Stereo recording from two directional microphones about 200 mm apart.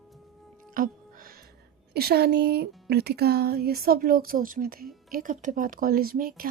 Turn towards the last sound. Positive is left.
turn(degrees=-45)  # may be behind; listen again after turning